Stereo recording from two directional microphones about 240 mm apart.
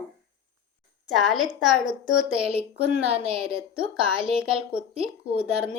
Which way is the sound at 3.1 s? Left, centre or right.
Right.